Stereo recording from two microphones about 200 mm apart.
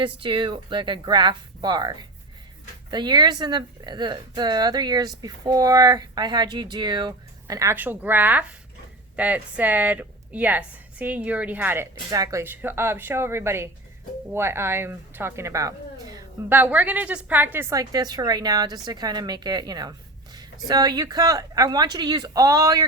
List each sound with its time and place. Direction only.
0.0 s a woman's voice: 25° right (ahead or behind)